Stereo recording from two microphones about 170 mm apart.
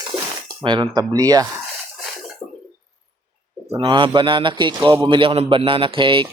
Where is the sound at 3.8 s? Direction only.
30° right (ahead or behind).